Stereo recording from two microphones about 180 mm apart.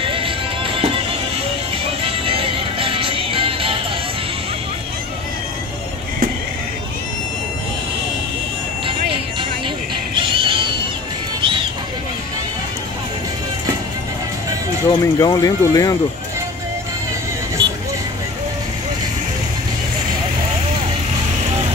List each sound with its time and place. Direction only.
0.0 s music: 30° right (ahead or behind)
2.0 s music: 30° right (ahead or behind)
10.2 s music: 30° right (ahead or behind)
14.9 s speech: 20° left (ahead or behind)